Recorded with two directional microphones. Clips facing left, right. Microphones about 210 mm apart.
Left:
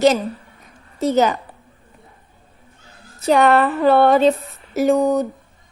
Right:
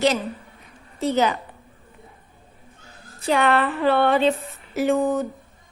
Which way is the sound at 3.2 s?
40° left (ahead or behind).